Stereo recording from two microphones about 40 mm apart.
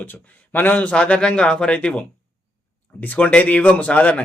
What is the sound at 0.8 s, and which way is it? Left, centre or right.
Speech, left.